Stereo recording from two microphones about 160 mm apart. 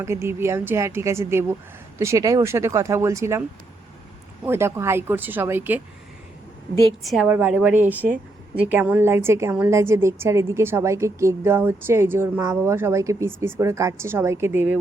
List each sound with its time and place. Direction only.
0.0 s a woman's voice: 15° right (ahead or behind)
4.4 s a woman's voice: 15° right (ahead or behind)
6.8 s a woman's voice: centre (ahead or behind)
7.3 s a woman's voice: 10° right (ahead or behind)